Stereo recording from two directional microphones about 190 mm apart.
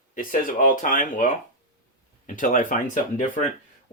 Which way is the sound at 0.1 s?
45° left (ahead or behind).